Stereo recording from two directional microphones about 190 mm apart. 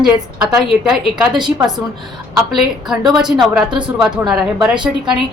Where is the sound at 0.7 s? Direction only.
Centre (ahead or behind).